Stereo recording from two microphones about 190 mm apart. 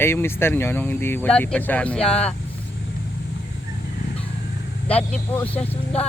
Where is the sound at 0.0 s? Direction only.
10° left (ahead or behind).